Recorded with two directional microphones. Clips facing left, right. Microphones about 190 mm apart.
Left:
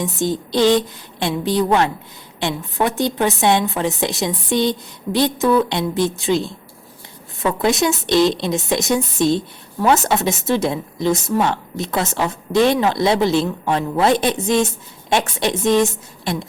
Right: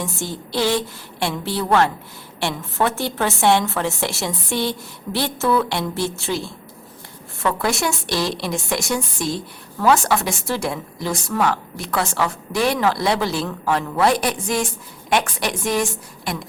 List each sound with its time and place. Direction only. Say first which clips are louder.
0.0 s a woman's voice: left 7 dB; 20° left (ahead or behind)